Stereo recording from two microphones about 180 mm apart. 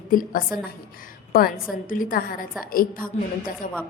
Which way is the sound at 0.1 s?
50° left (ahead or behind).